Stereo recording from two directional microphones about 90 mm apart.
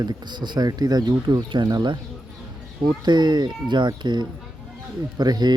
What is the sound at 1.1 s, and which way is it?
Speech, 60° right (ahead or behind).